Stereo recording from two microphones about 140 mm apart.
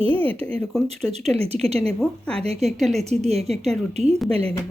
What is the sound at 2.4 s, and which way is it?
A woman's voice, 50° right (ahead or behind).